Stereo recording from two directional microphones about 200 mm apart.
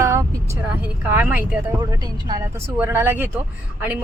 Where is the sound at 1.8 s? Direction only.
20° right (ahead or behind).